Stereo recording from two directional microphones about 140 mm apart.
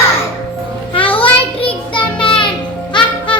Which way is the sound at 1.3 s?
40° left (ahead or behind).